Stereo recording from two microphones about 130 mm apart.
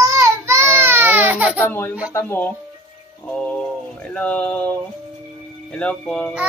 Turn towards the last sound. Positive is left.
turn(degrees=10)  # may be behind; listen again after turning